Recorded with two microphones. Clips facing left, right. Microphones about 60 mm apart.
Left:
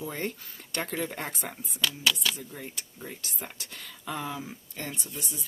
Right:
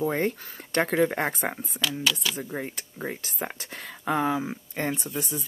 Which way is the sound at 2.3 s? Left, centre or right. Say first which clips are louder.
Right 8 dB; right.